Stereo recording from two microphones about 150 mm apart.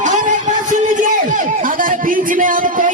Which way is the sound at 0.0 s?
60° right (ahead or behind).